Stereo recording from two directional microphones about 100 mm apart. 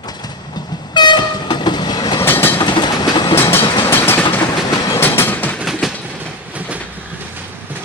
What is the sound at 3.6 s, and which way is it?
Train, 50° left (ahead or behind).